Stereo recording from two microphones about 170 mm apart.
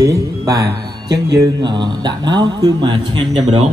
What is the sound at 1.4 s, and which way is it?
Speech, 25° right (ahead or behind).